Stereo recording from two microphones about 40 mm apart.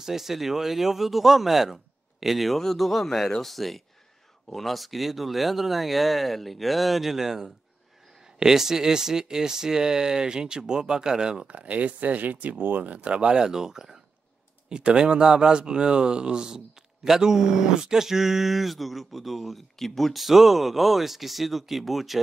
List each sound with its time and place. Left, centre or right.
0.0 s speech: centre
11.4 s a man's voice: right; by 22.2 s centre